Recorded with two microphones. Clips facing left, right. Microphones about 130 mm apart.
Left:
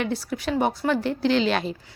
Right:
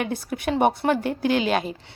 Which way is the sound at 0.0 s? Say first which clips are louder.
Left 1 dB; 50° right (ahead or behind).